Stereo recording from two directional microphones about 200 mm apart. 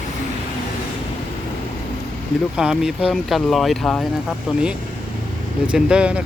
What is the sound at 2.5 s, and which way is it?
Speech, 5° right (ahead or behind).